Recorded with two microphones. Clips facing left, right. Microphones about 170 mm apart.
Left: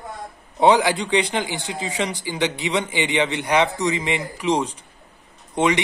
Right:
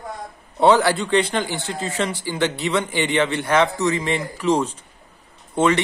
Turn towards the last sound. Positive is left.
turn(degrees=15)  # may be behind; listen again after turning